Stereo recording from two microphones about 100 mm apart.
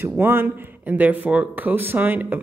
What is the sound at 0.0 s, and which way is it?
Speech, 20° right (ahead or behind).